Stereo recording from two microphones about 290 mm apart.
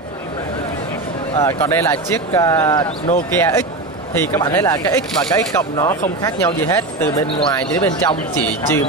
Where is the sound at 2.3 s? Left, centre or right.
Centre.